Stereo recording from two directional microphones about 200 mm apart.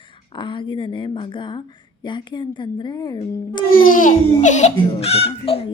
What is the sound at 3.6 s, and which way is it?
A woman's voice, 45° left (ahead or behind).